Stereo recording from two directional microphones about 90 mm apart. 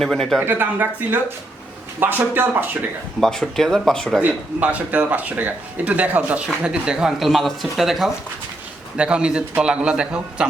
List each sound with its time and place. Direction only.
0.0 s speech: 5° left (ahead or behind)
0.3 s speech: 25° right (ahead or behind)
3.2 s speech: 5° left (ahead or behind)
4.2 s speech: 15° right (ahead or behind)